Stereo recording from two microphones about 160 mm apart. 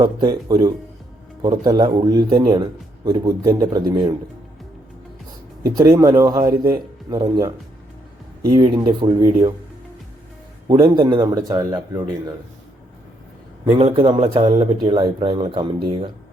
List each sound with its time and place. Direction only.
0.0 s speech: 25° right (ahead or behind)
5.6 s speech: 20° right (ahead or behind)
10.7 s speech: 30° right (ahead or behind)
13.7 s speech: 35° right (ahead or behind)